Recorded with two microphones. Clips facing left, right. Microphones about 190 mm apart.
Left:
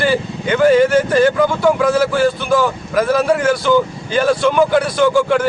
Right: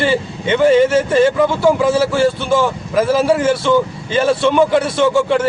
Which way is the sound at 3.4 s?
25° right (ahead or behind).